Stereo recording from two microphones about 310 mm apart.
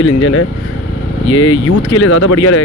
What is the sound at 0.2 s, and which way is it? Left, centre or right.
Speech, left.